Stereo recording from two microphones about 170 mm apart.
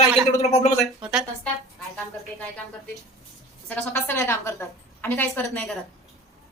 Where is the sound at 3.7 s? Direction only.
10° left (ahead or behind).